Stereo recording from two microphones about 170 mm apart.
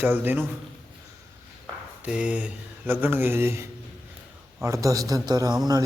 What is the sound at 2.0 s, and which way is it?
A man's voice, 5° right (ahead or behind).